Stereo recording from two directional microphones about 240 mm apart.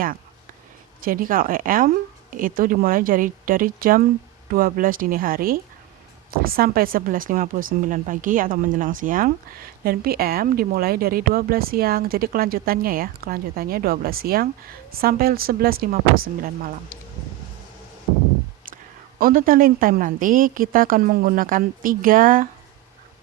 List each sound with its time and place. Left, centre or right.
1.0 s speech: right
19.2 s speech: right